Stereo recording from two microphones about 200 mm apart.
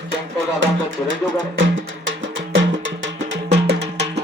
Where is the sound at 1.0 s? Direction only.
70° right (ahead or behind).